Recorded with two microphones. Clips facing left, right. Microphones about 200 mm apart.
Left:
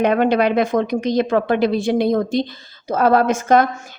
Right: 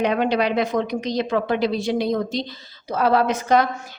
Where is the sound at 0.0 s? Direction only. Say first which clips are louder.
Left 4 dB; 55° left (ahead or behind).